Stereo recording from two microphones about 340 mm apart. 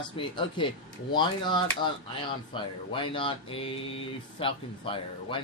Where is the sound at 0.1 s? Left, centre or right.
Centre.